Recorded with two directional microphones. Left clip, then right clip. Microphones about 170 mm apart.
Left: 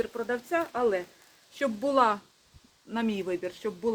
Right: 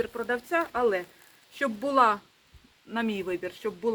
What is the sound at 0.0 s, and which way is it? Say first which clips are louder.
Speech: right 1 dB; centre (ahead or behind).